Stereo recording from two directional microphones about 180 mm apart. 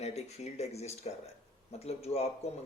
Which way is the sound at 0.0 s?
35° left (ahead or behind).